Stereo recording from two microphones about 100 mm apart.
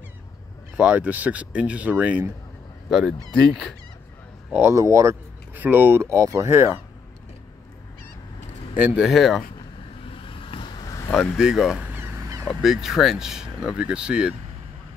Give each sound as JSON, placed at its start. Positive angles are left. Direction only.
{"t": 0.7, "sound": "speech", "side_deg": -15}
{"t": 2.9, "sound": "speech", "side_deg": 0}
{"t": 4.5, "sound": "speech", "side_deg": -25}
{"t": 5.5, "sound": "speech", "side_deg": -20}
{"t": 8.7, "sound": "speech", "side_deg": -15}
{"t": 9.0, "sound": "speech", "side_deg": 0}
{"t": 10.1, "sound": "vehicle", "side_deg": 60}
{"t": 11.1, "sound": "speech", "side_deg": -5}